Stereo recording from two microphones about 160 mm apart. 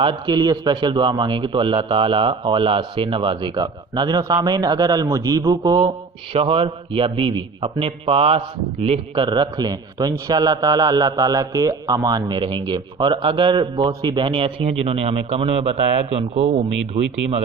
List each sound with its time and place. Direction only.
0.0 s a man's voice: 30° right (ahead or behind); by 16.6 s 45° right (ahead or behind)